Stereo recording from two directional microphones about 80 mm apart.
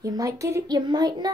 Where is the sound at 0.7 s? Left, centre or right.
Right.